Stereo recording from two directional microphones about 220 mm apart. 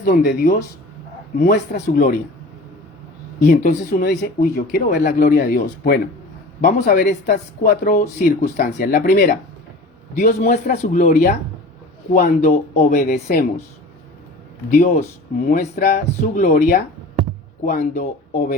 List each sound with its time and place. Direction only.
0.0 s speech: 40° left (ahead or behind)
3.6 s speech: 40° left (ahead or behind)
14.7 s speech: 35° left (ahead or behind)